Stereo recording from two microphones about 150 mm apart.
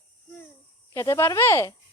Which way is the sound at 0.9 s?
20° left (ahead or behind).